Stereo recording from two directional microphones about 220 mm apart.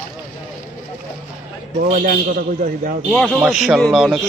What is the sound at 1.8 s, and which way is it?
A man's voice, 35° right (ahead or behind).